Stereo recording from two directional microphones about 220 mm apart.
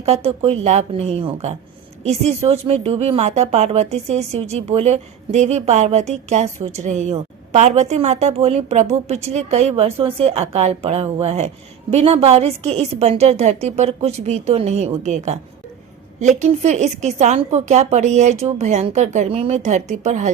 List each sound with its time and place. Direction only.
0.0 s a woman's voice: 30° right (ahead or behind)